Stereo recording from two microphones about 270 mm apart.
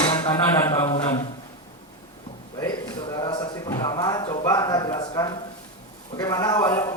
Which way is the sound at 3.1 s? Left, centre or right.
Centre.